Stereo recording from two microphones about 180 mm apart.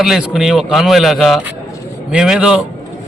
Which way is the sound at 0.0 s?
Centre (ahead or behind).